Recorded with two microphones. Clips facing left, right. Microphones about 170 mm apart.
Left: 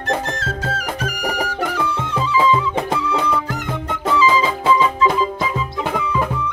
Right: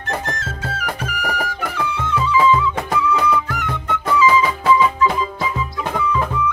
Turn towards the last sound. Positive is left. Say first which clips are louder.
# even
turn(degrees=25)  # may be behind; listen again after turning